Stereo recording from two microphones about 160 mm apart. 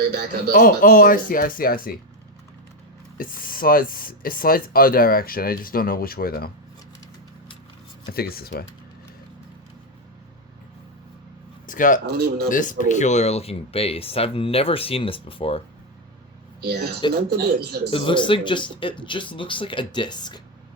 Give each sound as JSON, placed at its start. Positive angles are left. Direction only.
{"t": 0.1, "sound": "speech", "side_deg": -80}
{"t": 0.5, "sound": "speech", "side_deg": 60}
{"t": 3.2, "sound": "speech", "side_deg": 60}
{"t": 8.1, "sound": "speech", "side_deg": 70}
{"t": 11.6, "sound": "speech", "side_deg": 55}
{"t": 12.0, "sound": "speech", "side_deg": -80}
{"t": 12.5, "sound": "speech", "side_deg": 55}
{"t": 16.6, "sound": "speech", "side_deg": -80}
{"t": 17.9, "sound": "speech", "side_deg": 30}